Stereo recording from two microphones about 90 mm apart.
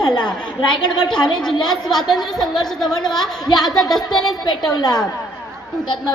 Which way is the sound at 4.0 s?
50° left (ahead or behind).